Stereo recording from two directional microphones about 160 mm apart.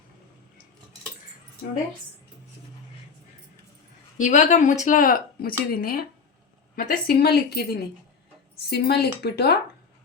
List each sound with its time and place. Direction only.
4.2 s speech: 50° left (ahead or behind); by 6.1 s 70° left (ahead or behind)
6.7 s a woman's voice: 55° left (ahead or behind)
7.2 s a woman's voice: 80° left